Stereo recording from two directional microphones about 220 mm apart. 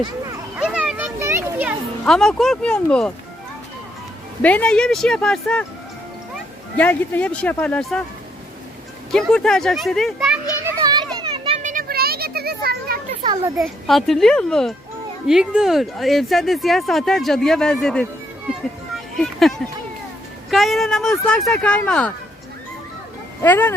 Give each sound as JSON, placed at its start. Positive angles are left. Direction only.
{"t": 0.0, "sound": "children playing", "side_deg": -10}
{"t": 2.0, "sound": "speech", "side_deg": 0}
{"t": 4.4, "sound": "speech", "side_deg": 5}
{"t": 6.7, "sound": "speech", "side_deg": 5}
{"t": 9.1, "sound": "speech", "side_deg": 5}
{"t": 10.6, "sound": "children playing", "side_deg": -15}
{"t": 13.6, "sound": "speech", "side_deg": 0}
{"t": 19.1, "sound": "speech", "side_deg": 0}
{"t": 23.4, "sound": "speech", "side_deg": 10}